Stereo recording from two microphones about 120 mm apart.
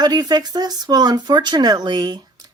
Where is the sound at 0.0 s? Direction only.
35° right (ahead or behind).